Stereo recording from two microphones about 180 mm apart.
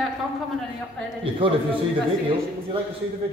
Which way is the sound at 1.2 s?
30° right (ahead or behind).